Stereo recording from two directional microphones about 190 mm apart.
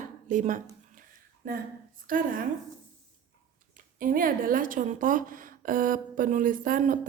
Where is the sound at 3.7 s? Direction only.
45° right (ahead or behind).